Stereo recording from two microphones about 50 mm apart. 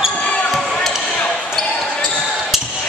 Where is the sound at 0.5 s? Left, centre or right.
Centre.